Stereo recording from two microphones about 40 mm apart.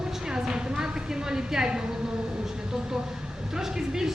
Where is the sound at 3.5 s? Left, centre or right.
Centre.